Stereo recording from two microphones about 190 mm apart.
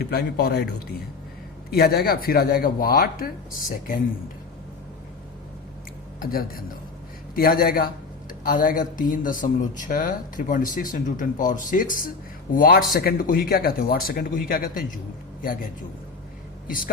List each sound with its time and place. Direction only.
0.0 s a man's voice: 60° left (ahead or behind)
7.3 s speech: 50° left (ahead or behind)
16.6 s speech: 45° left (ahead or behind)